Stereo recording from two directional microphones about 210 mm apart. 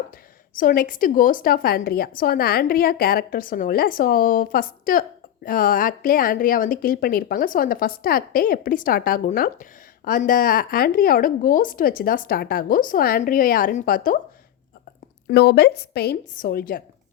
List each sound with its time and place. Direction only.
0.5 s a woman's voice: 45° left (ahead or behind)
15.3 s a woman's voice: 50° left (ahead or behind)